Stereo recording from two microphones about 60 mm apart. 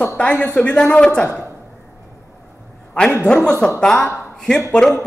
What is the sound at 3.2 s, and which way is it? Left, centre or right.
A man's voice, centre.